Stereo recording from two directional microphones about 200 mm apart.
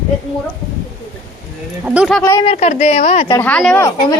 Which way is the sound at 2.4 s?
35° left (ahead or behind).